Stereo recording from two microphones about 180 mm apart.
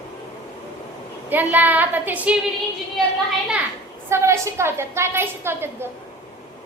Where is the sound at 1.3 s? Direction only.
10° right (ahead or behind).